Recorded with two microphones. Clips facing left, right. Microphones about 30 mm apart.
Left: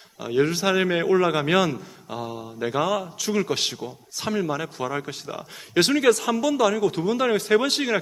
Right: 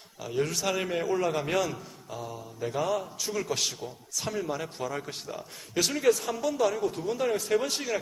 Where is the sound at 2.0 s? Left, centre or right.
Left.